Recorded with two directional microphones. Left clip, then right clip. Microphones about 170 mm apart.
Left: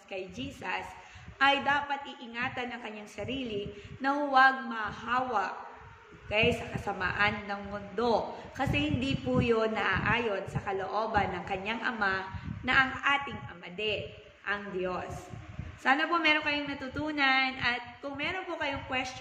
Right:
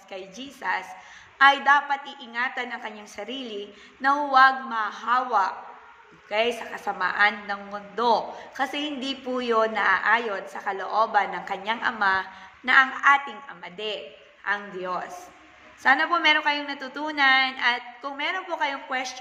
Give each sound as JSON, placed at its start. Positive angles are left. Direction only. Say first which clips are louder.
{"t": 0.1, "sound": "a man's voice", "louder": "right 1 dB", "side_deg": 15}